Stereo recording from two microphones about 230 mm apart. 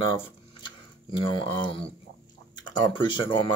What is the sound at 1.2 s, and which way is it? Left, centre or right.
Speech, left.